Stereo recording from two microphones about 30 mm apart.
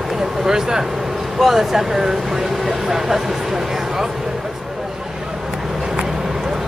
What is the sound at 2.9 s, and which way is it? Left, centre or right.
Speech, centre.